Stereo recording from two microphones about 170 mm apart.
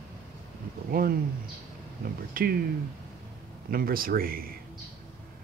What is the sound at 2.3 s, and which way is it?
Speech, 60° right (ahead or behind).